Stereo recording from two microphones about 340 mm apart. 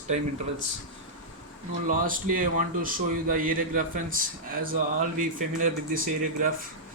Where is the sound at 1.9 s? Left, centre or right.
Right.